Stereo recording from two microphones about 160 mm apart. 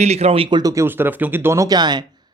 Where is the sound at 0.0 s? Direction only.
40° right (ahead or behind).